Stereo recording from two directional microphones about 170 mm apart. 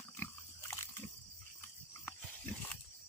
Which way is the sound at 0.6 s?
15° left (ahead or behind).